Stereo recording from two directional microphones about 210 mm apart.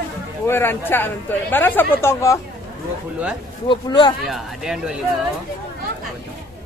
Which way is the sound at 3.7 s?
20° left (ahead or behind).